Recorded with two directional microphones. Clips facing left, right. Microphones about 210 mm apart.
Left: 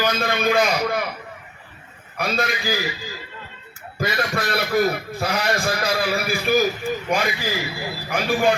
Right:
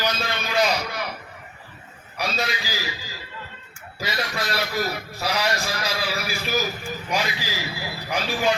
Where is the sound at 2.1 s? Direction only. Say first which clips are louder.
Left 3 dB; 55° left (ahead or behind).